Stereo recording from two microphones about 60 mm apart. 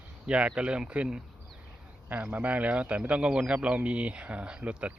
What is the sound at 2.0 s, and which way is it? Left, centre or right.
A man's voice, right.